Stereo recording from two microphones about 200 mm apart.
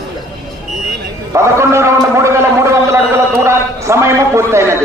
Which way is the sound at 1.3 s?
15° right (ahead or behind).